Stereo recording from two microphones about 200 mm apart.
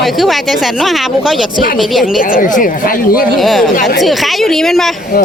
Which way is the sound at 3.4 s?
Centre (ahead or behind).